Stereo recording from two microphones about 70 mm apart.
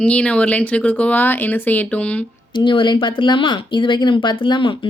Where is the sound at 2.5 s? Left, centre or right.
Left.